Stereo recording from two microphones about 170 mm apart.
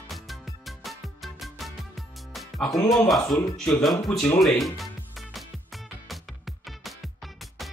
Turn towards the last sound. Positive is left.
turn(degrees=0)  # may be behind; listen again after turning